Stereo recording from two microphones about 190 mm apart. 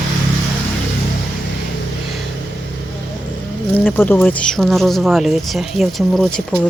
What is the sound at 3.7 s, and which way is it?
Speech, 10° left (ahead or behind).